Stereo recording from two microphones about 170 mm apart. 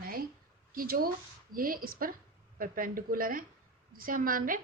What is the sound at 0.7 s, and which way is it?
A woman's voice, 60° right (ahead or behind).